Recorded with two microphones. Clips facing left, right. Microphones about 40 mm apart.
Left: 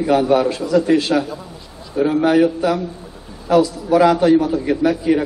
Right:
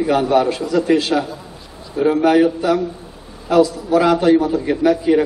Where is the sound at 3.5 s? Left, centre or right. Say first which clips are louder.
Even; right.